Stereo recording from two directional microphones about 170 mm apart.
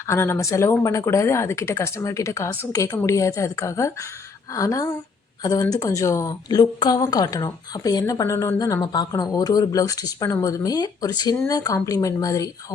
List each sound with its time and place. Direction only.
0.1 s speech: 15° left (ahead or behind)